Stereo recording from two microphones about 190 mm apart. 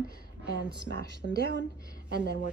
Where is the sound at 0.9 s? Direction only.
60° right (ahead or behind).